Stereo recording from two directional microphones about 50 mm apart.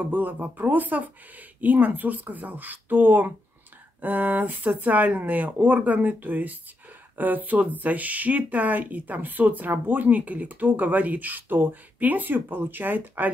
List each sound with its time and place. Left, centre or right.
0.0 s speech: right